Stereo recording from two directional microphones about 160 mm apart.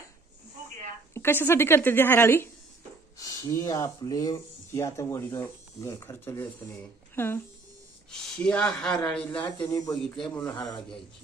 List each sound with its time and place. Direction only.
1.1 s a woman's voice: 15° left (ahead or behind)